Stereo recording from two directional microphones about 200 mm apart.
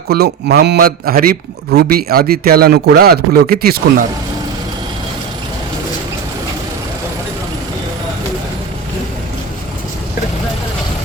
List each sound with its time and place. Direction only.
0.1 s a man's voice: 50° right (ahead or behind)